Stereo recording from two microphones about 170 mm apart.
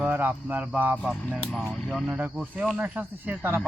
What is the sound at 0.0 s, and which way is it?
Speech, 10° right (ahead or behind).